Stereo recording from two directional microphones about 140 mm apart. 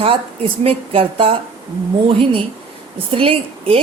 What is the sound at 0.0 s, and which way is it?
A woman's voice, 40° right (ahead or behind).